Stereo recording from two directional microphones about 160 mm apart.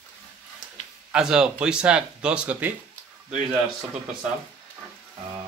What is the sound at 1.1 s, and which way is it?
Speech, 5° right (ahead or behind).